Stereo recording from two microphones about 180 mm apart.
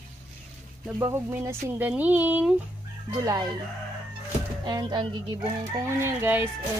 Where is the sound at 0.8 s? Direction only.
10° right (ahead or behind).